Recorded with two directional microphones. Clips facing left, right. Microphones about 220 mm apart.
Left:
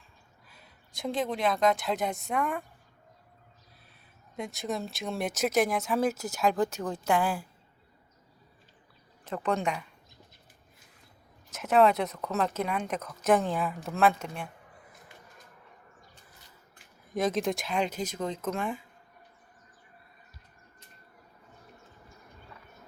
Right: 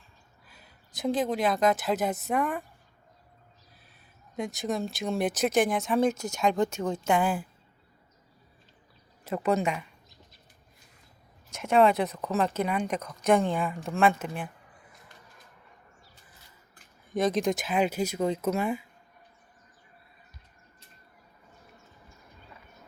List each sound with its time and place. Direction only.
0.4 s speech: centre (ahead or behind)
4.4 s speech: centre (ahead or behind)
9.2 s speech: 10° right (ahead or behind)
11.5 s speech: centre (ahead or behind)
17.1 s speech: centre (ahead or behind)